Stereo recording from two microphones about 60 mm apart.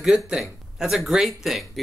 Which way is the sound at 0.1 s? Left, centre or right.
Centre.